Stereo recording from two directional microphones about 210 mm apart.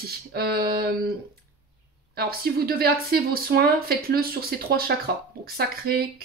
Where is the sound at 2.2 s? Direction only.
45° right (ahead or behind).